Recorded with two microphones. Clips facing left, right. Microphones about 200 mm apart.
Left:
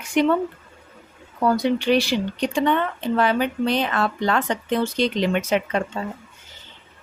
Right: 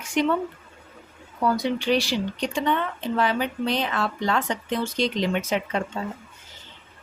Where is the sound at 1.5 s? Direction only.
55° left (ahead or behind).